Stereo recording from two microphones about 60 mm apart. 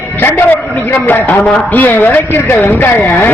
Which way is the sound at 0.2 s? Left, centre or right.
Left.